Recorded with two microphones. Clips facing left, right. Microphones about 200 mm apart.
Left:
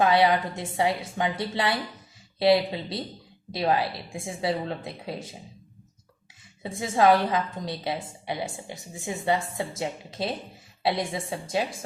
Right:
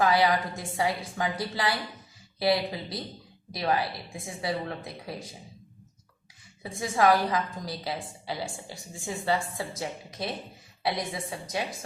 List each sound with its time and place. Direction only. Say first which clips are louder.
0.0 s a woman's voice: left 3 dB; 25° left (ahead or behind)
6.6 s a woman's voice: left 2 dB; 25° left (ahead or behind)